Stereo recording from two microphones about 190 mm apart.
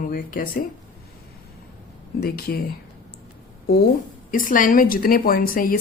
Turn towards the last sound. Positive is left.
turn(degrees=50)  # may be behind; listen again after turning